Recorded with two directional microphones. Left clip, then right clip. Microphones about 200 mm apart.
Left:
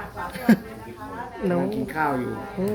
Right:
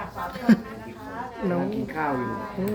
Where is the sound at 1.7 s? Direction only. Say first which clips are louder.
Left 3 dB; 45° left (ahead or behind).